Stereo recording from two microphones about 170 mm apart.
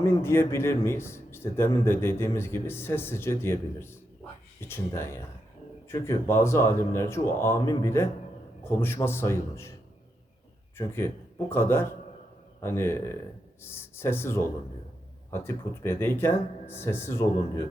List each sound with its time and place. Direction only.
0.0 s a man's voice: 15° left (ahead or behind)
10.8 s a man's voice: 15° left (ahead or behind)